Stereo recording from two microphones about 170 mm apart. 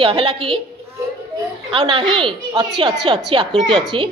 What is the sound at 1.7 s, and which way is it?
A woman's voice, 30° right (ahead or behind).